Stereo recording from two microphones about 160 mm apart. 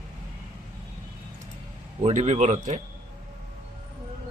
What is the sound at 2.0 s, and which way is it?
Speech, 45° right (ahead or behind).